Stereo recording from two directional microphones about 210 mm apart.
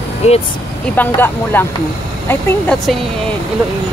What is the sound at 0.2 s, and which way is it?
Speech, 30° left (ahead or behind).